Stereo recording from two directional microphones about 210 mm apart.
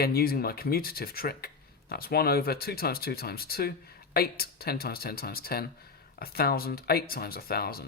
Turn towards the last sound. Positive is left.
turn(degrees=45)  # may be behind; listen again after turning